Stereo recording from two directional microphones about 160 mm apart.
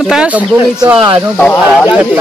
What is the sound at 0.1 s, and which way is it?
Speech, 5° right (ahead or behind).